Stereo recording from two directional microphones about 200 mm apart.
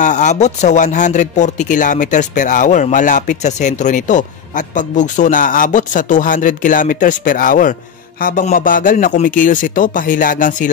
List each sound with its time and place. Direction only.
0.0 s speech: 35° left (ahead or behind)